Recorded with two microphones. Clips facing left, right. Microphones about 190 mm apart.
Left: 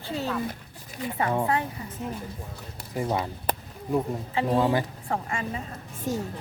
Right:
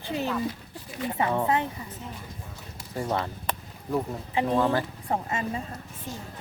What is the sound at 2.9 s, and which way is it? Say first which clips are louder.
Speech: left 1 dB; 10° left (ahead or behind).